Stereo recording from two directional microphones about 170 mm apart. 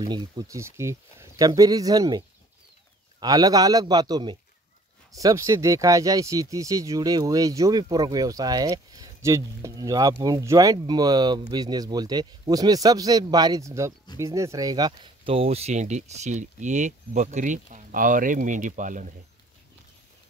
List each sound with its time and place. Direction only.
0.0 s speech: 25° right (ahead or behind); by 19.1 s 50° right (ahead or behind)